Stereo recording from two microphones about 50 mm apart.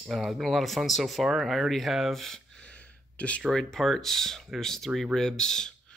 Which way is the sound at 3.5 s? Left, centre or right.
Centre.